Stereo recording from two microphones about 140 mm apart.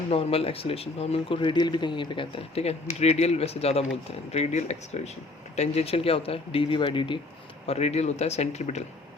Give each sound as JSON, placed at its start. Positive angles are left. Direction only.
{"t": 0.1, "sound": "speech", "side_deg": 45}
{"t": 7.7, "sound": "speech", "side_deg": 50}